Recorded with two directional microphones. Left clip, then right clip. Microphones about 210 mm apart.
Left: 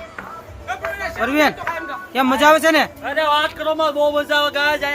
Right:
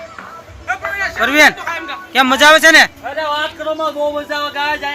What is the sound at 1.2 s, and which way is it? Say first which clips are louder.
A man's voice: right 7 dB; 5° right (ahead or behind).